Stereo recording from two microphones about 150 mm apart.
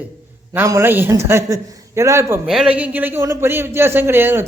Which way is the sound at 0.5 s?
20° right (ahead or behind).